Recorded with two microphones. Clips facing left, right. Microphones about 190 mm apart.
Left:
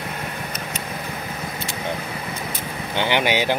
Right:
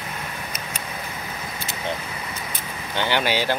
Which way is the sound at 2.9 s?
15° left (ahead or behind).